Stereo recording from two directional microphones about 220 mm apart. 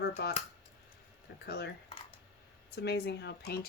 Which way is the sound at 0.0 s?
50° left (ahead or behind).